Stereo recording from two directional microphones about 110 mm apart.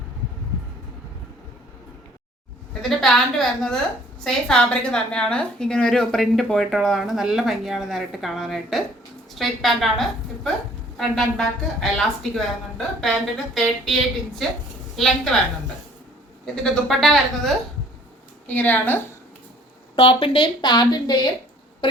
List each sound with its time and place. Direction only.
3.0 s a woman's voice: 5° left (ahead or behind)
16.6 s a woman's voice: 5° left (ahead or behind)
18.4 s a woman's voice: 15° left (ahead or behind)
20.0 s speech: 55° left (ahead or behind)